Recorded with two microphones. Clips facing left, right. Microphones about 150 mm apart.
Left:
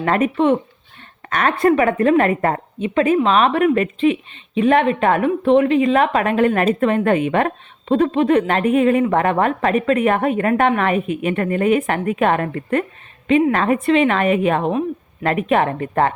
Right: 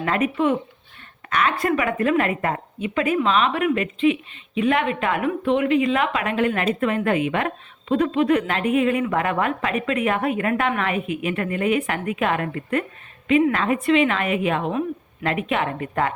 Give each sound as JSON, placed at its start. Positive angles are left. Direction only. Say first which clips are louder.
{"t": 0.0, "sound": "a woman's voice", "louder": "left 4 dB", "side_deg": 40}
{"t": 1.3, "sound": "a woman's voice", "louder": "left 5 dB", "side_deg": 45}